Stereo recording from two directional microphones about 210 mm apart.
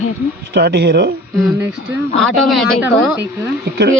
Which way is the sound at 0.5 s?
50° right (ahead or behind).